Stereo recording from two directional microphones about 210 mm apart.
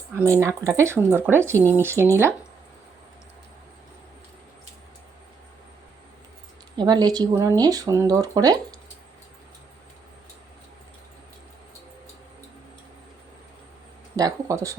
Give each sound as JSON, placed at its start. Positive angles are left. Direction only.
{"t": 0.2, "sound": "speech", "side_deg": -10}
{"t": 6.7, "sound": "speech", "side_deg": -20}
{"t": 14.2, "sound": "speech", "side_deg": -15}